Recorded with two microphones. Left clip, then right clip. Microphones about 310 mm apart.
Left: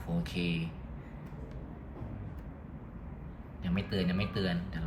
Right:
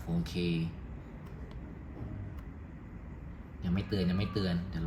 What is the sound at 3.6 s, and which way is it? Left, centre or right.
Speech, centre.